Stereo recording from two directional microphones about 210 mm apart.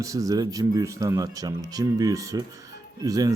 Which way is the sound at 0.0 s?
15° right (ahead or behind).